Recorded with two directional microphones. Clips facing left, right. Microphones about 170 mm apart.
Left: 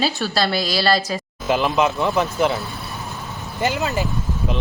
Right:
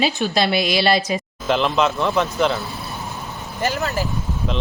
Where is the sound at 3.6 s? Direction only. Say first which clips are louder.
Left 1 dB; 20° left (ahead or behind).